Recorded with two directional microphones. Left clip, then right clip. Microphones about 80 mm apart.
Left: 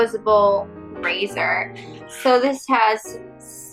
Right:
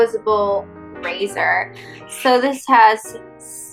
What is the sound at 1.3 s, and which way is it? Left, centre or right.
Speech, right.